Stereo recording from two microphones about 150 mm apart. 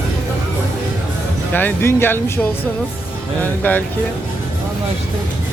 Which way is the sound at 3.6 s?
10° left (ahead or behind).